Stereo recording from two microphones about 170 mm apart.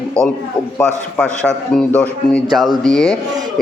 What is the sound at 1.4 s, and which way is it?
A man's voice, 5° left (ahead or behind).